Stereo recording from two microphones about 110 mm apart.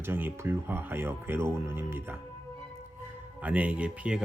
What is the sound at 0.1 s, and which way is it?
Speech, 20° right (ahead or behind).